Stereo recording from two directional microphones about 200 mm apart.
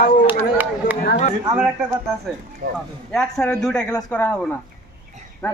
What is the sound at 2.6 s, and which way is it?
Speech, 55° right (ahead or behind).